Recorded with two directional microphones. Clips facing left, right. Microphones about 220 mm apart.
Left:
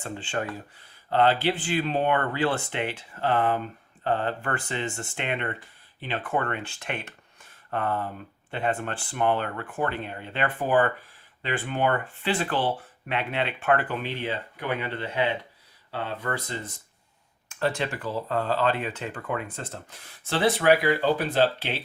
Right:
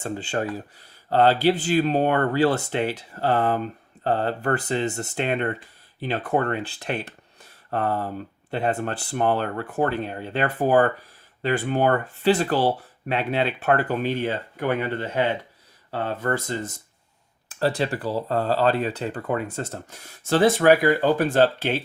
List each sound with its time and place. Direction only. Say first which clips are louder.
0.0 s speech: right 4 dB; 40° right (ahead or behind)
17.5 s speech: right 4 dB; 35° right (ahead or behind)